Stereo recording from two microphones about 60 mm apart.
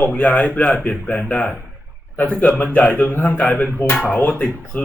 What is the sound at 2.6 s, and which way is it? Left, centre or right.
Speech, left.